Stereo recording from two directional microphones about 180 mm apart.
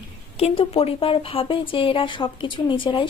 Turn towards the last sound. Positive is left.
turn(degrees=30)  # may be behind; listen again after turning